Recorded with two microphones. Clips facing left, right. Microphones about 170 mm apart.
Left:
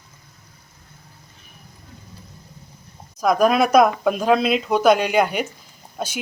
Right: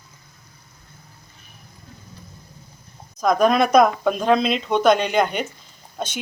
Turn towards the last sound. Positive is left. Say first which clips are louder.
# left 1 dB
turn(degrees=5)  # may be behind; listen again after turning